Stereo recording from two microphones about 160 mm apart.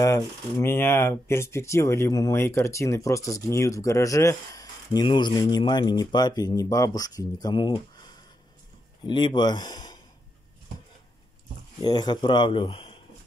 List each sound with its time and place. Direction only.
0.0 s speech: 20° left (ahead or behind)
11.8 s speech: 25° left (ahead or behind)